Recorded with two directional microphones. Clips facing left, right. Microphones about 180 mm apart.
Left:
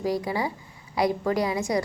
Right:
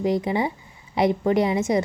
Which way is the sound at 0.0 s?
20° right (ahead or behind).